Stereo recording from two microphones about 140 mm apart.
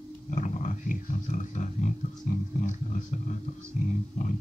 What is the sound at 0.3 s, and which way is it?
Pig, 65° left (ahead or behind).